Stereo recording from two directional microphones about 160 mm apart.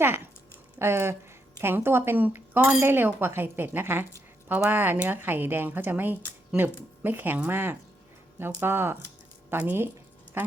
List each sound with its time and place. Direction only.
0.0 s speech: 15° right (ahead or behind)